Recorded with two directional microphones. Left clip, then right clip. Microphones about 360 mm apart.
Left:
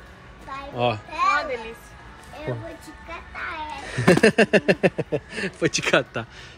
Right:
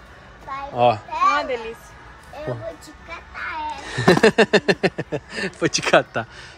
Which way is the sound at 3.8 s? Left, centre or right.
Centre.